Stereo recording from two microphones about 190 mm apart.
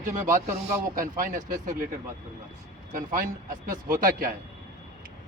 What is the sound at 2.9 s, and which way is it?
Speech, 45° right (ahead or behind).